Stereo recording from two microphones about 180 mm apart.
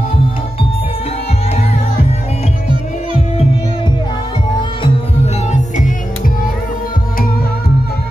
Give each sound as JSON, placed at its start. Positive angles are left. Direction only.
{"t": 4.8, "sound": "music", "side_deg": 40}